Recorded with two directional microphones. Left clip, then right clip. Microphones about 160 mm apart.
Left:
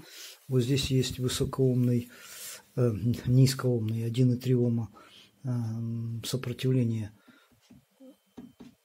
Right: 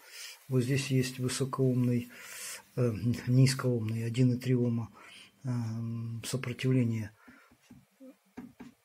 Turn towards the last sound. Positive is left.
turn(degrees=25)  # may be behind; listen again after turning